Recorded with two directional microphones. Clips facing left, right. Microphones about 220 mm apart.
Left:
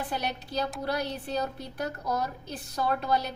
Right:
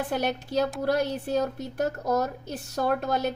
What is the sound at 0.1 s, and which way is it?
A woman's voice, 50° right (ahead or behind).